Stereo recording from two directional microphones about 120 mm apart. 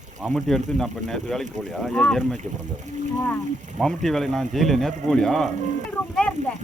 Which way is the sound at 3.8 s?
Centre (ahead or behind).